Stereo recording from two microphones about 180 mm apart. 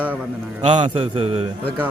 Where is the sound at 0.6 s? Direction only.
25° right (ahead or behind).